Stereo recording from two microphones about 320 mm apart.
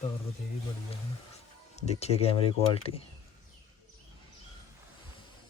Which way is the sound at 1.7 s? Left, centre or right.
Centre.